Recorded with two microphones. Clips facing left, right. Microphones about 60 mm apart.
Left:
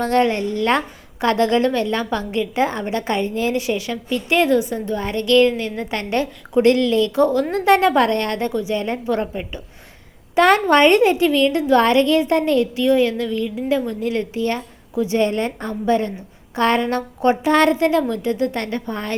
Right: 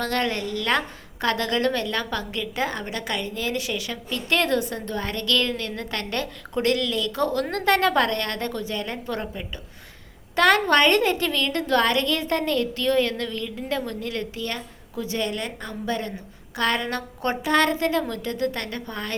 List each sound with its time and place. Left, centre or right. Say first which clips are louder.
0.0 s a woman's voice: left 8 dB; left
8.8 s a woman's voice: left 8 dB; left